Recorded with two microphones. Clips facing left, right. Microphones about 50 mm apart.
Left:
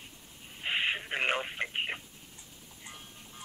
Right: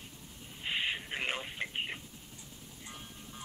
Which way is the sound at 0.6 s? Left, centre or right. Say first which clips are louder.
Left 4 dB; left.